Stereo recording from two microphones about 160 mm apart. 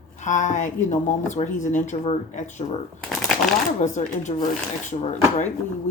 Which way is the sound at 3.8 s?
50° left (ahead or behind).